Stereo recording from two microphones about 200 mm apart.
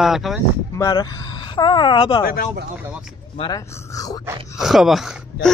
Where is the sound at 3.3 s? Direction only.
20° left (ahead or behind).